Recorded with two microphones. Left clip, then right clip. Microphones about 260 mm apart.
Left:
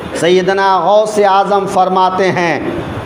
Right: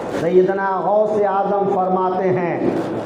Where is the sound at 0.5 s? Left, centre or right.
Left.